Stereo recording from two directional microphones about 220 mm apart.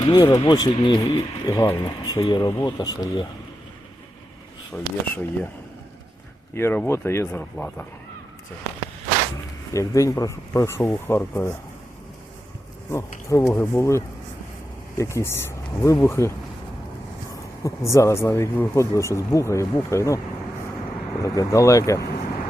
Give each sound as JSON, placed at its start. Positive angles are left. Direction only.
{"t": 0.0, "sound": "speech", "side_deg": 20}
{"t": 4.7, "sound": "speech", "side_deg": 10}
{"t": 6.5, "sound": "speech", "side_deg": 10}
{"t": 9.7, "sound": "speech", "side_deg": 15}
{"t": 12.9, "sound": "speech", "side_deg": 15}
{"t": 17.6, "sound": "speech", "side_deg": 15}
{"t": 21.2, "sound": "speech", "side_deg": 15}